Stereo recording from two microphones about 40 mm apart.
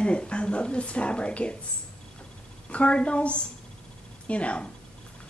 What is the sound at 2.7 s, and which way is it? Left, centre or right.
Speech, left.